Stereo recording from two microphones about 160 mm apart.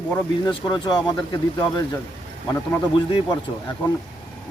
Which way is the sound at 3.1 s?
25° left (ahead or behind).